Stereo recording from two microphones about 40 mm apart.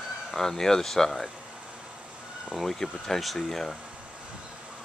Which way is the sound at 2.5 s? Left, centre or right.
Centre.